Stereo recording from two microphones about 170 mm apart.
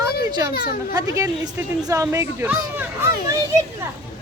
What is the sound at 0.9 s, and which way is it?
Speech, 20° right (ahead or behind).